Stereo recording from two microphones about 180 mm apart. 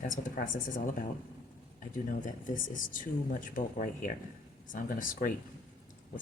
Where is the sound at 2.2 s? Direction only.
45° left (ahead or behind).